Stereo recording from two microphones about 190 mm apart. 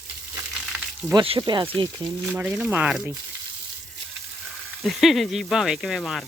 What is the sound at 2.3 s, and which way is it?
Speech, 10° right (ahead or behind).